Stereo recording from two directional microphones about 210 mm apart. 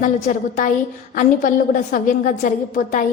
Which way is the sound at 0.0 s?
40° left (ahead or behind).